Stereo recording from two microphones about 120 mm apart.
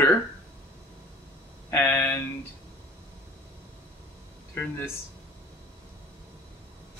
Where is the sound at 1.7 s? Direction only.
20° left (ahead or behind).